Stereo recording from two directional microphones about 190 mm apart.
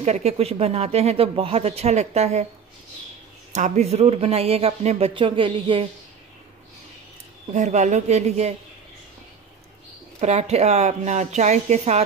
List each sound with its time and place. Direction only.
0.0 s speech: 35° right (ahead or behind)
3.5 s speech: 40° right (ahead or behind)
7.5 s speech: 40° right (ahead or behind)
10.2 s speech: 35° right (ahead or behind)